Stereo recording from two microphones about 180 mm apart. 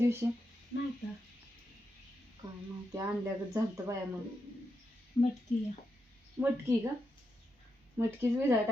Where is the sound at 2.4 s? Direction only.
20° right (ahead or behind).